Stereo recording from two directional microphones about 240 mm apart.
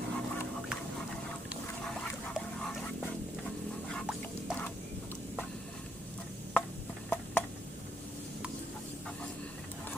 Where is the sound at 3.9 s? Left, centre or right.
Centre.